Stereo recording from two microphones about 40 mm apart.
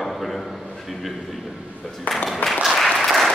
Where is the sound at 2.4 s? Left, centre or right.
Left.